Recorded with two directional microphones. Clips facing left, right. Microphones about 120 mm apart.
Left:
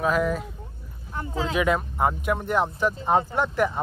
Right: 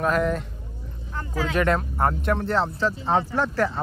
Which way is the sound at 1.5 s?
5° left (ahead or behind).